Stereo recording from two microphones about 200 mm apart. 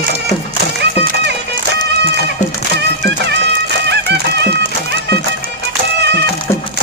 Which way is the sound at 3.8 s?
55° right (ahead or behind).